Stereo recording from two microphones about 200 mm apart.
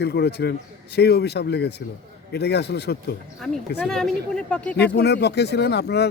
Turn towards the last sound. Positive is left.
turn(degrees=55)  # may be behind; listen again after turning